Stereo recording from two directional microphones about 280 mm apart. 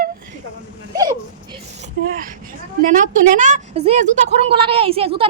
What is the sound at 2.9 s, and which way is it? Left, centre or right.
A woman's voice, right.